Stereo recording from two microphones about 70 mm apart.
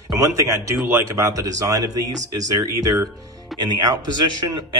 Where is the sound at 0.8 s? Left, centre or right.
Right.